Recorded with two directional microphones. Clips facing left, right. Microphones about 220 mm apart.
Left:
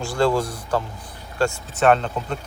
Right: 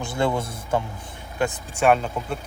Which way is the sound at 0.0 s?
20° right (ahead or behind).